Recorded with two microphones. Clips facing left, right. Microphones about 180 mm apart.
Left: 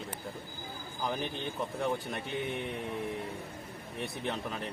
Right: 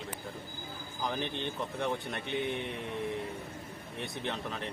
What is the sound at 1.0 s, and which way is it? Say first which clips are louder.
Speech: even; 5° left (ahead or behind).